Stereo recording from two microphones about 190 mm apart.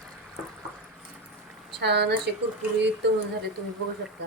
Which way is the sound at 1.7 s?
60° right (ahead or behind).